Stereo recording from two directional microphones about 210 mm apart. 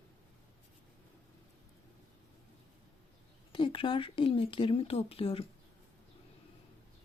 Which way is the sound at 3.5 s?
25° left (ahead or behind).